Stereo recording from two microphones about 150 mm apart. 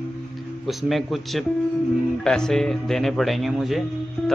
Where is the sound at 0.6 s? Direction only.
Centre (ahead or behind).